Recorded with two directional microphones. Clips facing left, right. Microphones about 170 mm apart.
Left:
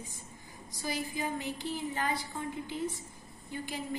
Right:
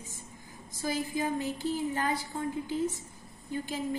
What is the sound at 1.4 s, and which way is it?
Speech, 45° right (ahead or behind).